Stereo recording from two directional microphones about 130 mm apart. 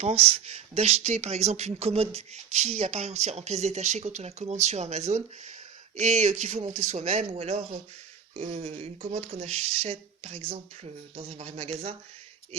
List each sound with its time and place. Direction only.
0.0 s speech: 50° right (ahead or behind)